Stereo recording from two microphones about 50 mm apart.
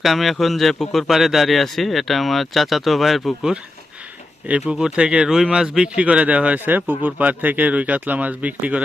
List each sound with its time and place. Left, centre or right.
0.0 s speech: centre
1.1 s speech: centre
4.4 s speech: right